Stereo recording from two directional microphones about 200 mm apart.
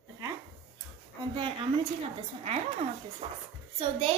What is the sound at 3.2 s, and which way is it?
Speech, 30° right (ahead or behind).